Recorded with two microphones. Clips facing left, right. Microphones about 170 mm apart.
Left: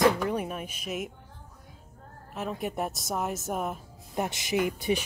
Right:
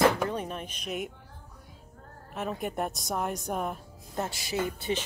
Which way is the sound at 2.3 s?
Centre (ahead or behind).